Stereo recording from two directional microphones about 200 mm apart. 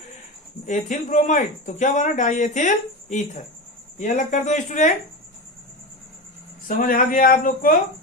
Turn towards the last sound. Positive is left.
turn(degrees=45)  # may be behind; listen again after turning